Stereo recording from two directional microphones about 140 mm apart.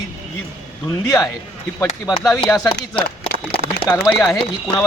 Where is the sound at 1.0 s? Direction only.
25° left (ahead or behind).